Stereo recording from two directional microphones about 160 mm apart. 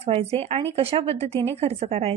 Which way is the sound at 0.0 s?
40° right (ahead or behind).